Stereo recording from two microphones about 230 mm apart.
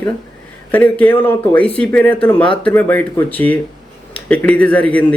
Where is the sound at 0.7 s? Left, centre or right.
Centre.